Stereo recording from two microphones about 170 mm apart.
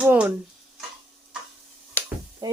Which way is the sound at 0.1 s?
10° right (ahead or behind).